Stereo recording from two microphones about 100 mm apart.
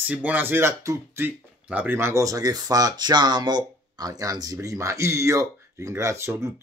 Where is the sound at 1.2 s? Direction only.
15° right (ahead or behind).